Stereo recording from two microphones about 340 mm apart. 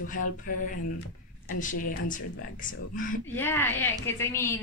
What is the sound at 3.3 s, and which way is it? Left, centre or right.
A woman's voice, centre.